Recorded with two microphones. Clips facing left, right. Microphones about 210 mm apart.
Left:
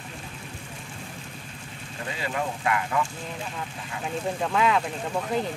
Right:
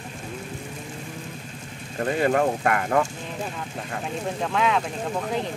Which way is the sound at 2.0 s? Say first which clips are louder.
Right 10 dB; 55° right (ahead or behind).